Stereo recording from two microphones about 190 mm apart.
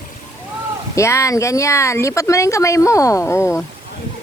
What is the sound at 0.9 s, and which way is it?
Speech, 15° left (ahead or behind).